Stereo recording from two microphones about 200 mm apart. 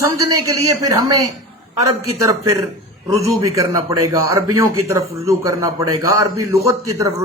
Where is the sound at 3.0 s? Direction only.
15° right (ahead or behind).